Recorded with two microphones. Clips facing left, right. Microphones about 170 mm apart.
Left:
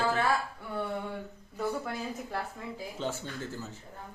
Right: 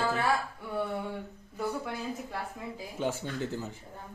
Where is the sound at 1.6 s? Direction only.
Centre (ahead or behind).